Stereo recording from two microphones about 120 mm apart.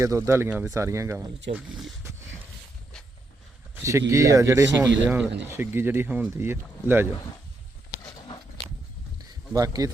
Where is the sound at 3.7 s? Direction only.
25° right (ahead or behind).